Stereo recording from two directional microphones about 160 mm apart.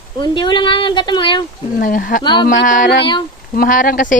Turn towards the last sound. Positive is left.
turn(degrees=60)  # may be behind; listen again after turning